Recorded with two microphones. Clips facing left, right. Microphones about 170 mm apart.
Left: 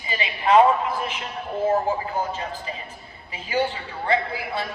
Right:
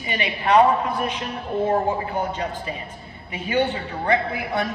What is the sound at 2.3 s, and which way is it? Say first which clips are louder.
Speech: right 3 dB; 25° left (ahead or behind).